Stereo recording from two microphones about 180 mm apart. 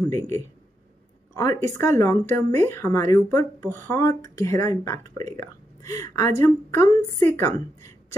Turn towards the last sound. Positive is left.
turn(degrees=15)  # may be behind; listen again after turning